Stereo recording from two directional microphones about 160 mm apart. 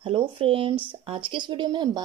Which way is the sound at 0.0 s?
35° right (ahead or behind).